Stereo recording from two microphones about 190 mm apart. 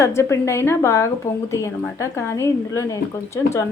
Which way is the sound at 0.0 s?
15° left (ahead or behind).